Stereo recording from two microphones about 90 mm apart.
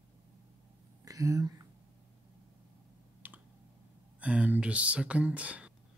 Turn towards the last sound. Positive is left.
turn(degrees=-15)  # may be behind; listen again after turning